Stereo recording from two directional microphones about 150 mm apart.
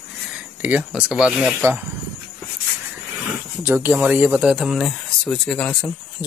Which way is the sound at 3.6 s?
15° right (ahead or behind).